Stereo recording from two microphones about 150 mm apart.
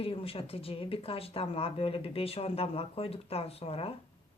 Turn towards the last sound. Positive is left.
turn(degrees=40)  # may be behind; listen again after turning